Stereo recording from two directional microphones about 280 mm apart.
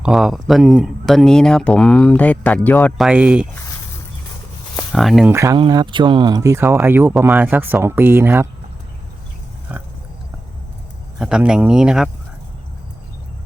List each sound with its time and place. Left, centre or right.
0.0 s speech: centre
4.8 s speech: centre
11.2 s speech: centre